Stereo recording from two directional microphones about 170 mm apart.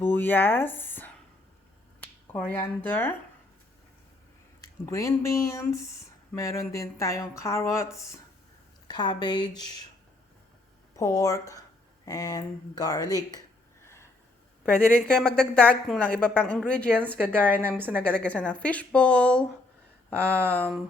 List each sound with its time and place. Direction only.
0.0 s speech: 10° left (ahead or behind)
2.2 s a woman's voice: 10° left (ahead or behind)
4.9 s a woman's voice: 15° left (ahead or behind)
10.9 s speech: 20° left (ahead or behind)
13.8 s snort: 15° left (ahead or behind)
14.6 s a woman's voice: 5° left (ahead or behind)
17.3 s a woman's voice: 10° right (ahead or behind)
18.1 s a woman's voice: 5° left (ahead or behind)